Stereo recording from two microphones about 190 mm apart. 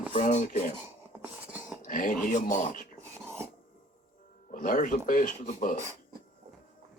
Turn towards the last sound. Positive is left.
turn(degrees=45)  # may be behind; listen again after turning